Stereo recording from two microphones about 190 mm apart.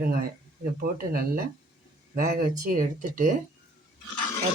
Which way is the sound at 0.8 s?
50° right (ahead or behind).